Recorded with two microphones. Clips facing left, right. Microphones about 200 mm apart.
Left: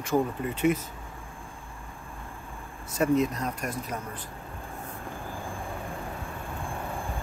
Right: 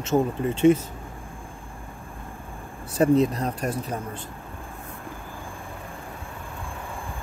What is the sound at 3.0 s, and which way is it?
Speech, 30° right (ahead or behind).